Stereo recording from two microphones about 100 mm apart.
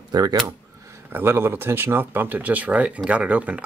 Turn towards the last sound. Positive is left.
turn(degrees=-15)  # may be behind; listen again after turning